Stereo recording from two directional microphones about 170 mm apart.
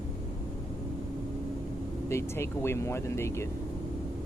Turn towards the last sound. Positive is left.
turn(degrees=15)  # may be behind; listen again after turning